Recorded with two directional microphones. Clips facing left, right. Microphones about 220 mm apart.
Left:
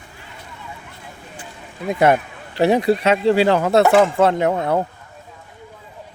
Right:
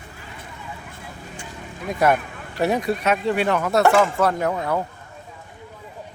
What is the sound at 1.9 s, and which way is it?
Speech, 25° left (ahead or behind).